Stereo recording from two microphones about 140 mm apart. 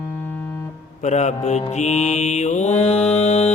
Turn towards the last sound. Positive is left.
turn(degrees=50)  # may be behind; listen again after turning